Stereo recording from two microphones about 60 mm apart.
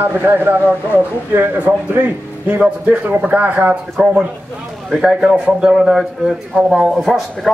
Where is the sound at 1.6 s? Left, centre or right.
Right.